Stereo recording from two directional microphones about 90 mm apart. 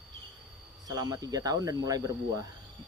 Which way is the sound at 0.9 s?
45° right (ahead or behind).